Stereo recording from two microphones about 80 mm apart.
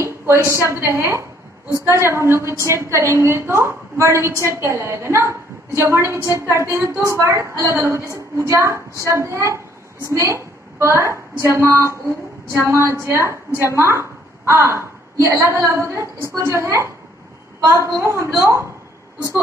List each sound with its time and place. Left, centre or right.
0.0 s a woman's voice: right